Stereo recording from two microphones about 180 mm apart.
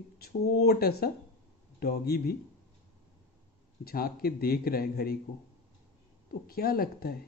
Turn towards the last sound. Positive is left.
turn(degrees=60)  # may be behind; listen again after turning